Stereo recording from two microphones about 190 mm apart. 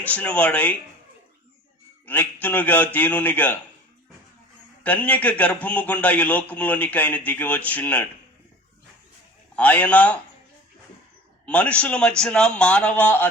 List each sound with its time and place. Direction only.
0.0 s a man's voice: 10° left (ahead or behind)
2.0 s a man's voice: 10° left (ahead or behind)
4.8 s a man's voice: 10° left (ahead or behind)
9.6 s a man's voice: 10° left (ahead or behind)
11.4 s a man's voice: 5° left (ahead or behind)